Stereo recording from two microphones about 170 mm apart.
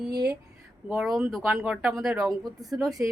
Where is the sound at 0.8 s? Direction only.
Centre (ahead or behind).